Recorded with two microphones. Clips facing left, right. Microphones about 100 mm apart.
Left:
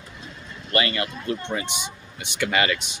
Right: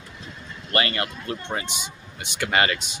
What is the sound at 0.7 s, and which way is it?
Speech, 35° right (ahead or behind).